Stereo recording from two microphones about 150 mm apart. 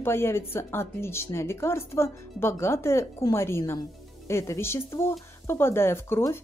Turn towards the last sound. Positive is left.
turn(degrees=15)  # may be behind; listen again after turning